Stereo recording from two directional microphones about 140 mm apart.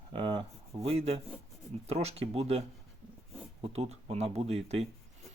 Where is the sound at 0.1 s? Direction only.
35° right (ahead or behind).